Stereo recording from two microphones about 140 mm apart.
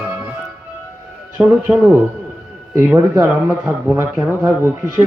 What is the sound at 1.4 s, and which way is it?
Speech, 10° right (ahead or behind).